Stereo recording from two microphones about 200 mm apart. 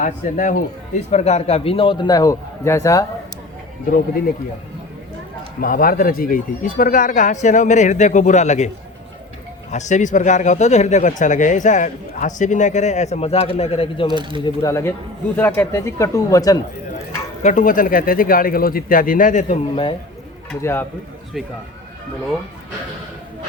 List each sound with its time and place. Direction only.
0.0 s speech: 40° left (ahead or behind); by 3.1 s 15° left (ahead or behind)
5.5 s speech: 45° left (ahead or behind)
9.7 s speech: 35° left (ahead or behind)
14.1 s speech: 25° right (ahead or behind)
14.4 s speech: 15° left (ahead or behind)
17.4 s speech: 40° left (ahead or behind)
20.5 s speech: 10° left (ahead or behind)
21.4 s speech: centre (ahead or behind)